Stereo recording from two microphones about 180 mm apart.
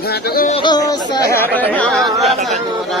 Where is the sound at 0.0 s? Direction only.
60° left (ahead or behind).